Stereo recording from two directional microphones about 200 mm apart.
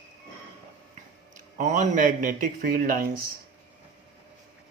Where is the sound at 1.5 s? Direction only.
40° right (ahead or behind).